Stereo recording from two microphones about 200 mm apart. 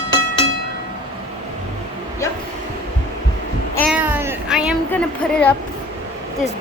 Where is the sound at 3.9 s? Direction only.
10° right (ahead or behind).